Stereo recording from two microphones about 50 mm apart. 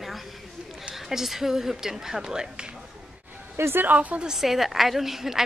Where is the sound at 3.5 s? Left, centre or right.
Right.